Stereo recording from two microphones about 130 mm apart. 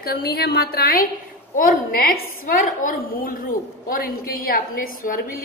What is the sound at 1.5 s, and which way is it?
A woman's voice, 90° left.